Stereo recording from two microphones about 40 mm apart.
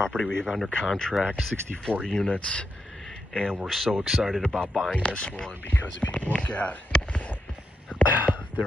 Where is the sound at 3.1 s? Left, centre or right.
Left.